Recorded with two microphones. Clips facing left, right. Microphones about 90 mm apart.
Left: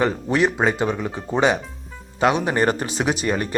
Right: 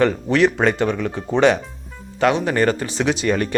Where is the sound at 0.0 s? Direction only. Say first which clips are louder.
Right 3 dB; 10° left (ahead or behind).